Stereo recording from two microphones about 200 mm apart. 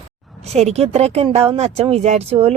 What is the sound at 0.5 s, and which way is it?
Speech, 35° right (ahead or behind).